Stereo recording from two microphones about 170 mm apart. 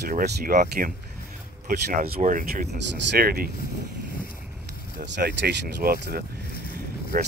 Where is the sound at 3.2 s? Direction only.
60° right (ahead or behind).